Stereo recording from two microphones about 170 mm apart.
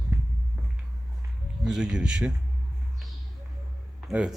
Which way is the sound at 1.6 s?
5° right (ahead or behind).